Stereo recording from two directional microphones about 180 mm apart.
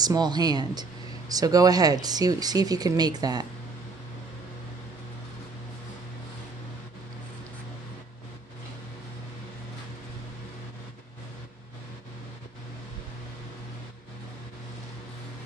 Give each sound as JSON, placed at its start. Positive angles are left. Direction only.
{"t": 0.0, "sound": "speech", "side_deg": -20}